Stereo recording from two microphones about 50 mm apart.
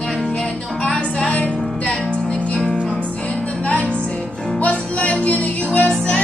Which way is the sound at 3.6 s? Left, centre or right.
Left.